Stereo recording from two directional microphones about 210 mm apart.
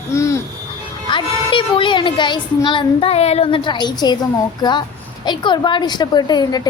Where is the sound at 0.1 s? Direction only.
15° left (ahead or behind).